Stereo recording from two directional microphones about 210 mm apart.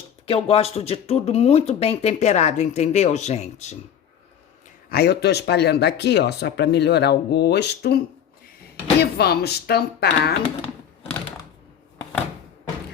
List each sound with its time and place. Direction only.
0.4 s speech: 30° left (ahead or behind)
4.9 s speech: 50° left (ahead or behind)
9.0 s speech: 50° left (ahead or behind)